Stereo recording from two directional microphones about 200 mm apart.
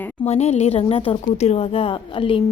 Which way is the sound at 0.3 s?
35° left (ahead or behind).